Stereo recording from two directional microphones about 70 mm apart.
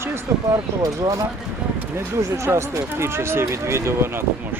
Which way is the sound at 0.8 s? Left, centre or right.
Right.